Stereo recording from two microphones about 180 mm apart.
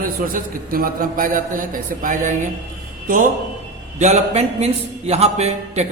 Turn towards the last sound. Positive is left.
turn(degrees=-35)  # may be behind; listen again after turning